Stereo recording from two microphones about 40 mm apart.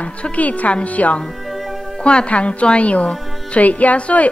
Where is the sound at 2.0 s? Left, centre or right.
Left.